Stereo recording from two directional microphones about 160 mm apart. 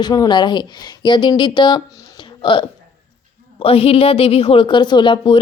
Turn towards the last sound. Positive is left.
turn(degrees=30)  # may be behind; listen again after turning